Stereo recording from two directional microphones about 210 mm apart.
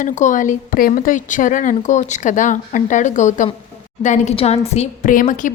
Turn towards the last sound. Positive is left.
turn(degrees=40)  # may be behind; listen again after turning